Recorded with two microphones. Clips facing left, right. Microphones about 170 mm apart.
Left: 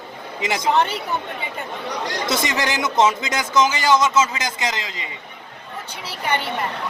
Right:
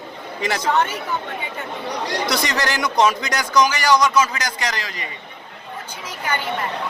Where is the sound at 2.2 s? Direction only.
20° left (ahead or behind).